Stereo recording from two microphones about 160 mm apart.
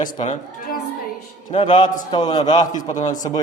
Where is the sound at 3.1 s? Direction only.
25° left (ahead or behind).